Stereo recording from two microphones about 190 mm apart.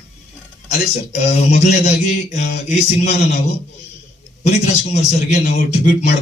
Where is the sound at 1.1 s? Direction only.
35° left (ahead or behind).